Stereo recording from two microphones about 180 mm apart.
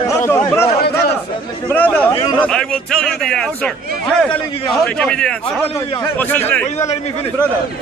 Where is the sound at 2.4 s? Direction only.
5° left (ahead or behind).